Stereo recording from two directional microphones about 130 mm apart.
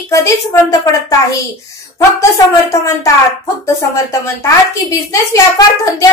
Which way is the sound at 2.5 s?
25° left (ahead or behind).